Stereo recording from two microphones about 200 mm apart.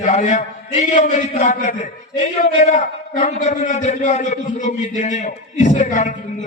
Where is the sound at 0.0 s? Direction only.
35° left (ahead or behind).